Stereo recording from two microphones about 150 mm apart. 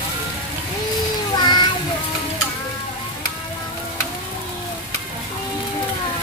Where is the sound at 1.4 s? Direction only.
30° left (ahead or behind).